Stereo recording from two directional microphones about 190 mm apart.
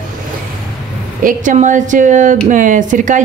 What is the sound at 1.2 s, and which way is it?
A woman's voice, 45° right (ahead or behind).